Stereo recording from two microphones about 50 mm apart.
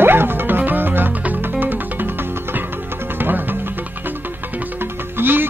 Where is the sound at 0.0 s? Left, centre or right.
Right.